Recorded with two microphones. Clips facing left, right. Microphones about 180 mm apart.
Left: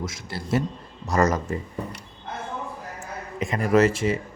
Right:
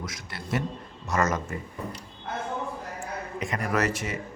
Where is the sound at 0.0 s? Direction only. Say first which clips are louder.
Left 5 dB; 30° left (ahead or behind).